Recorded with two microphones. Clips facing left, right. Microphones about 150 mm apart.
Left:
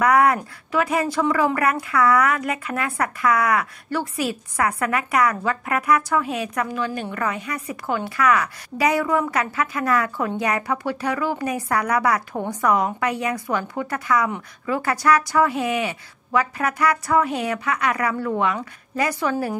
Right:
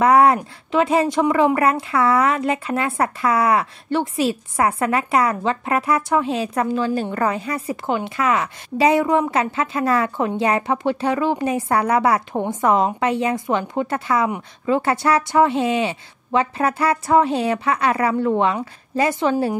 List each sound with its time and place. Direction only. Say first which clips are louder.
0.0 s speech: right 3 dB; 25° right (ahead or behind)